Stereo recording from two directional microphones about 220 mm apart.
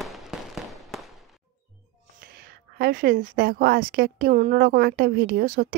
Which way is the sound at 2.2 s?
45° right (ahead or behind).